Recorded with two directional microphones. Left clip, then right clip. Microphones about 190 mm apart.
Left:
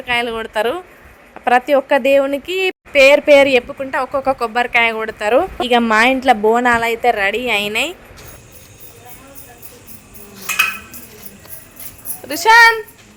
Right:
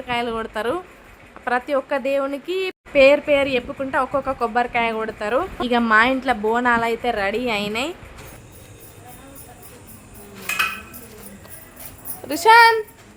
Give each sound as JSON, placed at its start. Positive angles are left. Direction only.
{"t": 0.0, "sound": "a woman's voice", "side_deg": 15}
{"t": 12.3, "sound": "a woman's voice", "side_deg": 10}